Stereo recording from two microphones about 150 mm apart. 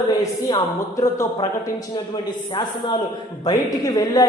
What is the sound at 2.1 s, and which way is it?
A man's voice, 35° left (ahead or behind).